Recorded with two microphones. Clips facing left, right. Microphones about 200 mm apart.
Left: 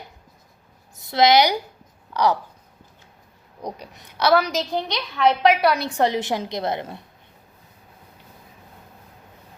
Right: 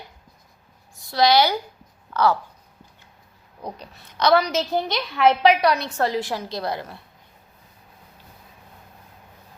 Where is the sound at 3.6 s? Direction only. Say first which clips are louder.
Left 2 dB; 15° left (ahead or behind).